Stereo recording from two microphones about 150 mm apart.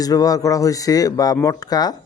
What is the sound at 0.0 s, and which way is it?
A man's voice, 25° left (ahead or behind).